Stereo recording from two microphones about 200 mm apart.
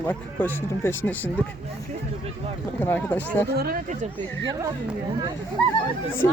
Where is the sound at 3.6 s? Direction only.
45° right (ahead or behind).